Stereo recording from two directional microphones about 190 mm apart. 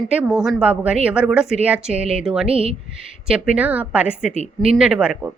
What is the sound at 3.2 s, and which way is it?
A woman's voice, 5° right (ahead or behind).